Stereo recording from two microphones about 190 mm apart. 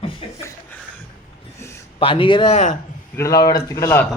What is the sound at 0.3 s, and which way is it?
Chuckle, 15° left (ahead or behind).